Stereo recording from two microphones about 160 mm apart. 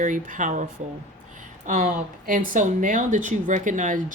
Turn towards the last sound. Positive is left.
turn(degrees=-55)  # may be behind; listen again after turning